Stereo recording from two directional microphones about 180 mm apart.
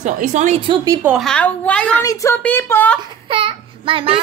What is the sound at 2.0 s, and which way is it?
Speech, 15° left (ahead or behind).